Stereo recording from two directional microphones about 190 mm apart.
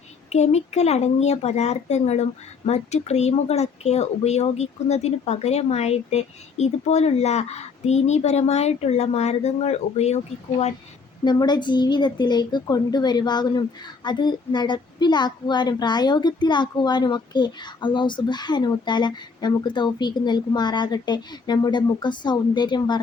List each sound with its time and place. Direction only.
0.3 s speech: 35° left (ahead or behind)
11.3 s speech: 20° left (ahead or behind)